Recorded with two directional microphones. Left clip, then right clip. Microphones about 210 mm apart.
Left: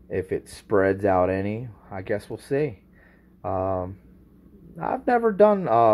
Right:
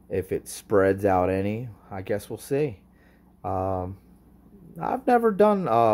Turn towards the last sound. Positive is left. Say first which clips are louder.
# left 3 dB
turn(degrees=-10)  # may be behind; listen again after turning